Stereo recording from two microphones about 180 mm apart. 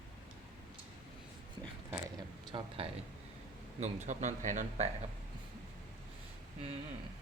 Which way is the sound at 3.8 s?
40° right (ahead or behind).